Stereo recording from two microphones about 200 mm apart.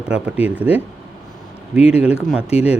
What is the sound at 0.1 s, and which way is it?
A man's voice, 5° right (ahead or behind).